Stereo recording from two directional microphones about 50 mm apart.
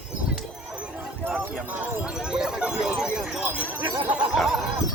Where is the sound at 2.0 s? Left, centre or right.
Centre.